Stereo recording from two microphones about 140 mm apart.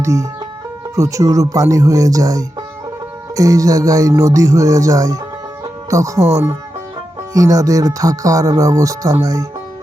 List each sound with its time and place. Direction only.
0.0 s speech: 25° right (ahead or behind)
7.3 s speech: 25° right (ahead or behind)